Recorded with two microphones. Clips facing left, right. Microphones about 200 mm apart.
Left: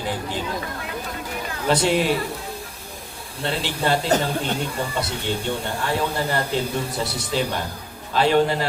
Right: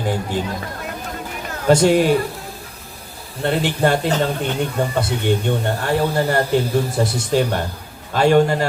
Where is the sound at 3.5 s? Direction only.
50° right (ahead or behind).